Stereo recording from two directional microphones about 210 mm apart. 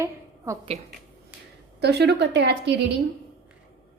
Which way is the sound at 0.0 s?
15° right (ahead or behind).